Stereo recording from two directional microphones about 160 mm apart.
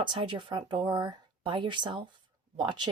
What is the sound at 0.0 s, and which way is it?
Speech, 30° right (ahead or behind).